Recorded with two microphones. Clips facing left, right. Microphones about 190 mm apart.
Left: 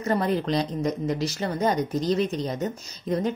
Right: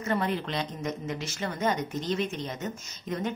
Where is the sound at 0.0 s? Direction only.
35° left (ahead or behind).